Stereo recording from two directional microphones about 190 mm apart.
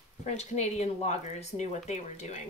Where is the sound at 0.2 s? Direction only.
40° left (ahead or behind).